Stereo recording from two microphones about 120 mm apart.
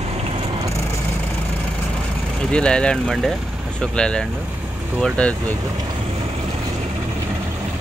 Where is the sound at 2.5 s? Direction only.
10° left (ahead or behind).